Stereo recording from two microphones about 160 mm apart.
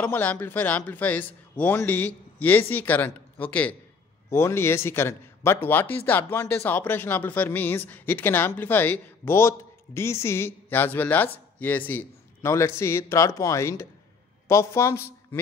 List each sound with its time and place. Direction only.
0.0 s speech: 10° left (ahead or behind)